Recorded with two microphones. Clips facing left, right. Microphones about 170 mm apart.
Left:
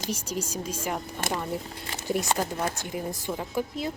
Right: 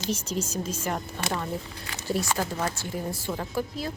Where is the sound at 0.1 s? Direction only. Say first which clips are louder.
Right 3 dB; 10° left (ahead or behind).